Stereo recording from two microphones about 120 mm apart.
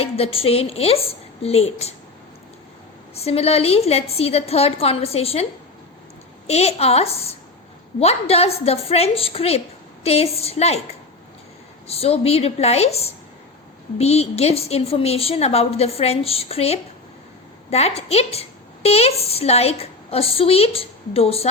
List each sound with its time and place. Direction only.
0.0 s a woman's voice: 55° left (ahead or behind)
3.2 s a woman's voice: 60° left (ahead or behind)
6.5 s a woman's voice: 60° left (ahead or behind)
11.9 s a woman's voice: 55° left (ahead or behind)